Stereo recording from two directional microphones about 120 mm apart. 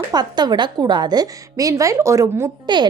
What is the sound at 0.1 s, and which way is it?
A woman's voice, 35° right (ahead or behind).